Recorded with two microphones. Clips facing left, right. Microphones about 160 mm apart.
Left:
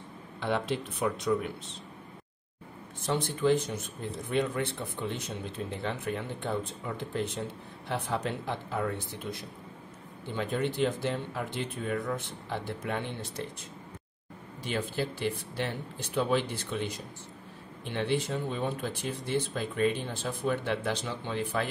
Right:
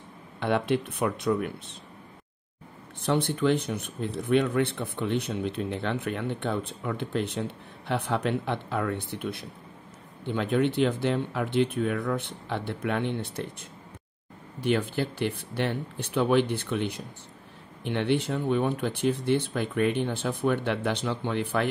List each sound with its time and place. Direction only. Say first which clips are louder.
0.4 s speech: right 5 dB; 60° right (ahead or behind)
3.0 s speech: right 4 dB; 60° right (ahead or behind)
14.6 s speech: right 6 dB; 60° right (ahead or behind)